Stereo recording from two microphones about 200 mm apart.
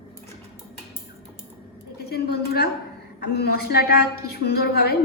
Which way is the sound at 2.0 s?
55° left (ahead or behind).